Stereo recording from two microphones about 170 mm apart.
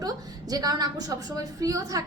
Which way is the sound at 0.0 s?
20° right (ahead or behind).